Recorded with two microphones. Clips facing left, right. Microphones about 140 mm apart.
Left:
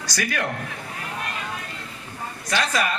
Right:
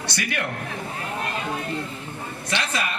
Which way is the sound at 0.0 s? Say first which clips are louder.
Left 1 dB; 25° right (ahead or behind).